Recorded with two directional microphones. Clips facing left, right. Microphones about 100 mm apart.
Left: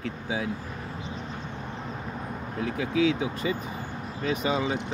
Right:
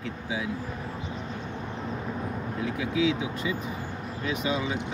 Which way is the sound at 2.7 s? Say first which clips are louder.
Left 2 dB; 45° left (ahead or behind).